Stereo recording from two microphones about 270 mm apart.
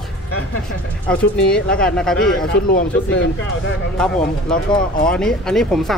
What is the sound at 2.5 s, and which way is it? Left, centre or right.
Speech, left.